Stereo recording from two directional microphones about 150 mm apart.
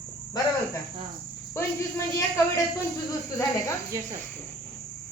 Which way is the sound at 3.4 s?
20° left (ahead or behind).